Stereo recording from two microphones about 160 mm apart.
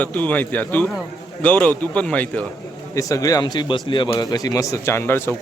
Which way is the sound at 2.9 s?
20° left (ahead or behind).